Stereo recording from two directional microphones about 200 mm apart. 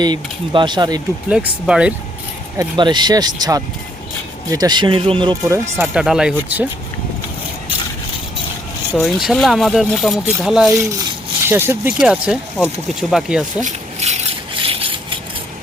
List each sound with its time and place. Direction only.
0.0 s speech: 20° right (ahead or behind)
1.3 s speech: 5° right (ahead or behind)
2.6 s speech: 20° right (ahead or behind)
5.7 s speech: 10° right (ahead or behind)
9.0 s speech: centre (ahead or behind)
13.6 s rub: 35° right (ahead or behind)